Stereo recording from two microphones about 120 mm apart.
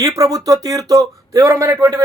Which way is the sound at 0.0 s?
30° right (ahead or behind).